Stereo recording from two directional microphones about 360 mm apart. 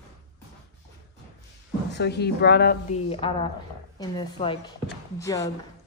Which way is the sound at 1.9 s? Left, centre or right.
Left.